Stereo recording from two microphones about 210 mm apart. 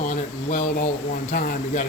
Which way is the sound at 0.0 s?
35° left (ahead or behind).